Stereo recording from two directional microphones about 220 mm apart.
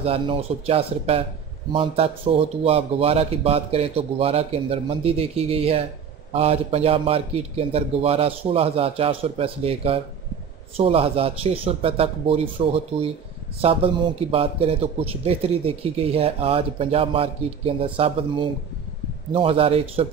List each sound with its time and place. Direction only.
0.0 s a man's voice: 25° right (ahead or behind)